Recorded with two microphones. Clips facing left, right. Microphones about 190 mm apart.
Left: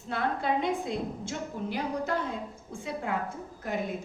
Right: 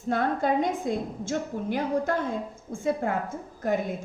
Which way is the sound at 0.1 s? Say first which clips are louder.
Right 5 dB; 45° right (ahead or behind).